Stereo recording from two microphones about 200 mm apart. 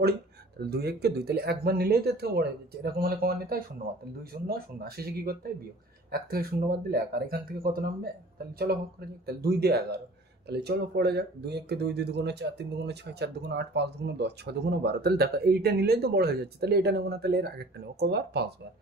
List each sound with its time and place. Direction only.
0.6 s speech: 50° right (ahead or behind)
8.5 s speech: 50° right (ahead or behind)